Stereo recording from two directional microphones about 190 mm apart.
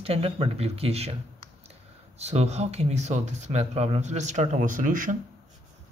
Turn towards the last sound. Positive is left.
turn(degrees=-45)  # may be behind; listen again after turning